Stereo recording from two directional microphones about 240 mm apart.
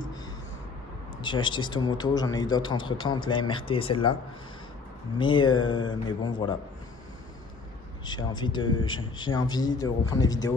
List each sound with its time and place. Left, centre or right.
1.1 s a man's voice: centre
5.2 s a man's voice: centre
8.0 s a man's voice: centre